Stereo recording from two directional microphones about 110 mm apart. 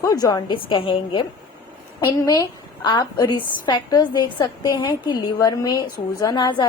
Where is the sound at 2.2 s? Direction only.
35° left (ahead or behind).